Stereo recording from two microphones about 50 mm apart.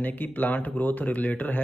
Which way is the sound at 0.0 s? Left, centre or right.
Left.